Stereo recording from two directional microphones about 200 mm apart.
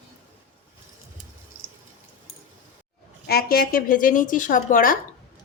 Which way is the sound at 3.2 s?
50° left (ahead or behind).